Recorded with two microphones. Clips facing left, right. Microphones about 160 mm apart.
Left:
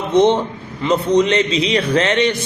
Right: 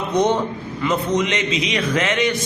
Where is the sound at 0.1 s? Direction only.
25° left (ahead or behind).